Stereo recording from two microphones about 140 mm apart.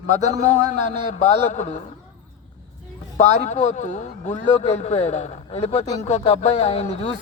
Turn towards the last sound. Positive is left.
turn(degrees=45)  # may be behind; listen again after turning